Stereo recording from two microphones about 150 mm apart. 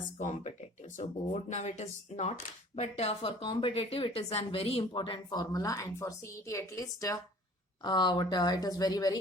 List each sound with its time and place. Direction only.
0.2 s speech: 55° left (ahead or behind); by 9.1 s 25° left (ahead or behind)